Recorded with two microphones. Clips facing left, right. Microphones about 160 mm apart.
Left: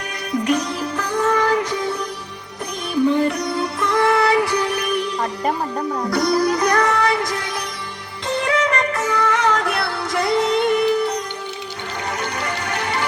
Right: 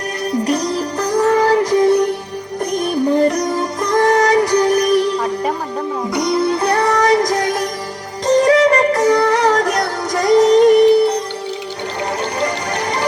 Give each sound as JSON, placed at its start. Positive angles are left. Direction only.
{"t": 0.3, "sound": "music", "side_deg": -35}
{"t": 2.7, "sound": "music", "side_deg": -40}
{"t": 5.2, "sound": "music", "side_deg": 0}
{"t": 6.1, "sound": "music", "side_deg": -20}
{"t": 12.2, "sound": "music", "side_deg": -35}